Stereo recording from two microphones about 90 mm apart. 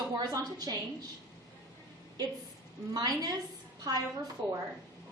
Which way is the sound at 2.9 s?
45° right (ahead or behind).